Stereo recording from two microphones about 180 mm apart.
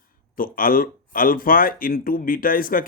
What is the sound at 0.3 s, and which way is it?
A man's voice, 50° left (ahead or behind).